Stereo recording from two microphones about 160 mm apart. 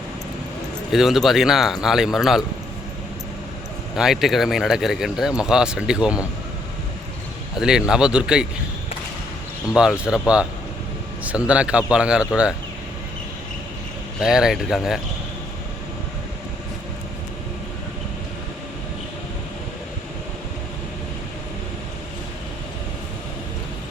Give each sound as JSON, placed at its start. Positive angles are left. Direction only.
{"t": 0.9, "sound": "speech", "side_deg": 0}
{"t": 3.9, "sound": "speech", "side_deg": 0}
{"t": 7.6, "sound": "speech", "side_deg": -5}
{"t": 10.0, "sound": "a man's voice", "side_deg": -5}
{"t": 14.2, "sound": "speech", "side_deg": -5}